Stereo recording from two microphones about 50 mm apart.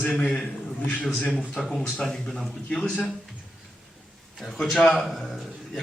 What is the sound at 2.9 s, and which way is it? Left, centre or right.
Speech, centre.